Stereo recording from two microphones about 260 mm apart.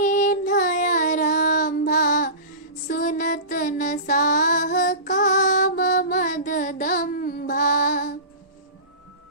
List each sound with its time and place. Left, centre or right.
0.0 s child singing: left
2.8 s music: left